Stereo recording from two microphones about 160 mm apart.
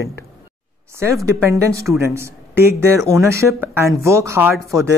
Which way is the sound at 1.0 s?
15° right (ahead or behind).